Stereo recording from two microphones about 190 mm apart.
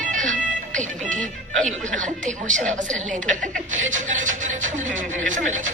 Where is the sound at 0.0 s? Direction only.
40° right (ahead or behind).